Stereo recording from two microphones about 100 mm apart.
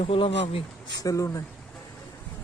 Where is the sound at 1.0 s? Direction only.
35° left (ahead or behind).